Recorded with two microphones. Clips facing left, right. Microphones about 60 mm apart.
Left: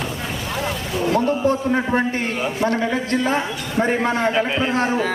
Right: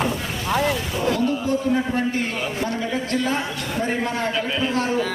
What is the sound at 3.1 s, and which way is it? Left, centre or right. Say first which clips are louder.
A man's voice: left 3 dB; left.